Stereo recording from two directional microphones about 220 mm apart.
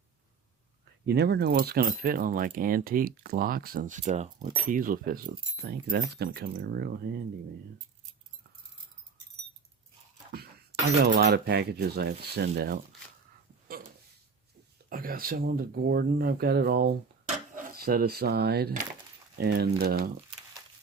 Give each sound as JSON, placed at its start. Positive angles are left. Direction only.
{"t": 1.0, "sound": "speech", "side_deg": -50}
{"t": 10.3, "sound": "speech", "side_deg": -45}
{"t": 14.8, "sound": "speech", "side_deg": -40}